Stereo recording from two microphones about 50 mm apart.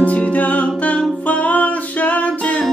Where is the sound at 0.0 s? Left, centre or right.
Left.